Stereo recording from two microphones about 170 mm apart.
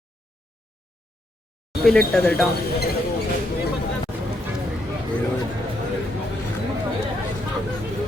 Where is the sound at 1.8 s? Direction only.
5° left (ahead or behind).